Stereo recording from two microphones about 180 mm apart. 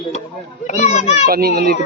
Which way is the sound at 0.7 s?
40° left (ahead or behind).